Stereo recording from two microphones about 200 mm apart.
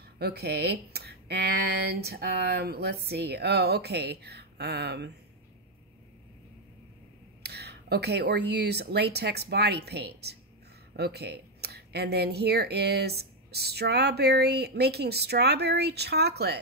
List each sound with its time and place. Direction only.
0.2 s speech: 50° right (ahead or behind)
7.4 s speech: 55° right (ahead or behind)